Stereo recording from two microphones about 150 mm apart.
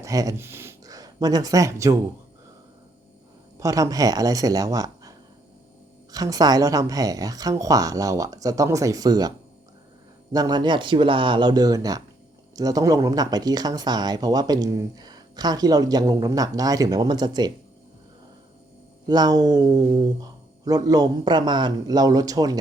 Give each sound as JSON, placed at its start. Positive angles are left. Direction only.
{"t": 0.0, "sound": "speech", "side_deg": -25}
{"t": 3.6, "sound": "speech", "side_deg": -20}
{"t": 10.3, "sound": "speech", "side_deg": -25}
{"t": 19.0, "sound": "speech", "side_deg": -25}
{"t": 19.7, "sound": "a sound", "side_deg": -45}
{"t": 20.7, "sound": "speech", "side_deg": -25}